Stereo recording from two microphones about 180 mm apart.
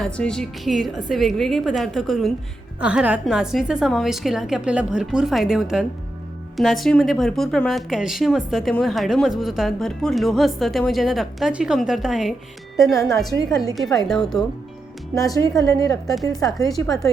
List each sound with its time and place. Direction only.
0.0 s a woman's voice: 5° left (ahead or behind)
12.8 s a woman's voice: 20° left (ahead or behind)
15.1 s a woman's voice: 20° left (ahead or behind)